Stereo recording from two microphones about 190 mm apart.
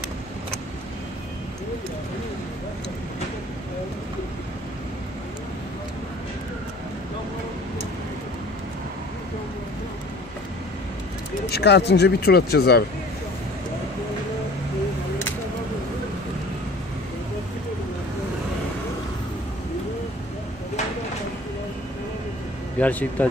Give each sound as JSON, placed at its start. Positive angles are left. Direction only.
{"t": 11.5, "sound": "speech", "side_deg": 60}
{"t": 22.8, "sound": "speech", "side_deg": 10}